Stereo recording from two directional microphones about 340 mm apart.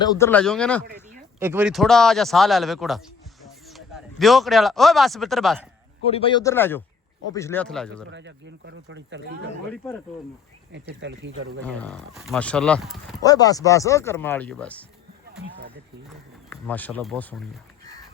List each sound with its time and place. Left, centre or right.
0.0 s speech: centre
6.1 s speech: centre
8.1 s speech: right
9.7 s speech: centre
10.7 s speech: right
11.6 s speech: centre
13.2 s speech: centre
16.5 s speech: centre